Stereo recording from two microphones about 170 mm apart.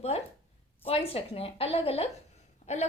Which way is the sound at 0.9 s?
35° left (ahead or behind).